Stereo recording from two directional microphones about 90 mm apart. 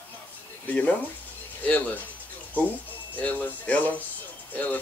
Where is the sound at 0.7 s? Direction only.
15° left (ahead or behind).